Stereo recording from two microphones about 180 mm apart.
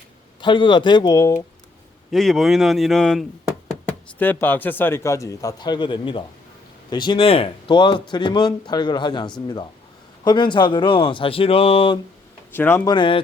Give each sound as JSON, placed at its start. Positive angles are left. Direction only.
{"t": 0.4, "sound": "speech", "side_deg": 25}
{"t": 2.0, "sound": "a man's voice", "side_deg": 0}
{"t": 12.5, "sound": "speech", "side_deg": 15}